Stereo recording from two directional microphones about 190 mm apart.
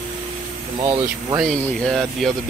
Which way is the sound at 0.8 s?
15° right (ahead or behind).